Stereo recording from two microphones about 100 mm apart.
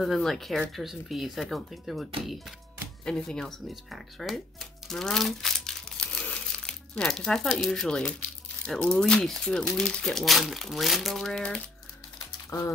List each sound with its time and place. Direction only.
0.0 s speech: 5° left (ahead or behind)
3.1 s speech: 5° left (ahead or behind)
12.4 s speech: 30° left (ahead or behind)